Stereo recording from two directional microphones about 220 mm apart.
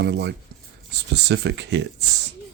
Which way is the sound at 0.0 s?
50° right (ahead or behind).